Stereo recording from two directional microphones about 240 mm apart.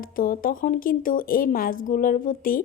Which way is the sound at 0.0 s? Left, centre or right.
Left.